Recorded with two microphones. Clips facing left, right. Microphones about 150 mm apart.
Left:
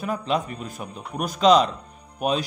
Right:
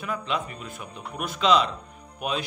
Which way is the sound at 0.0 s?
40° left (ahead or behind).